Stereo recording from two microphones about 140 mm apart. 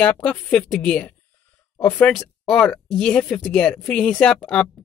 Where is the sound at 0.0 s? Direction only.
10° left (ahead or behind).